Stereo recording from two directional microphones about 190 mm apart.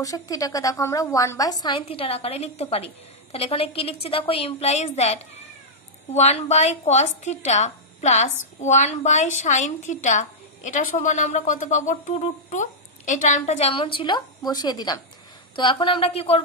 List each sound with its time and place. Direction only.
0.0 s a woman's voice: 20° left (ahead or behind)